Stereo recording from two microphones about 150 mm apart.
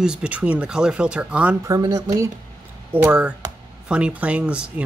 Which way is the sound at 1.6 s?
25° right (ahead or behind).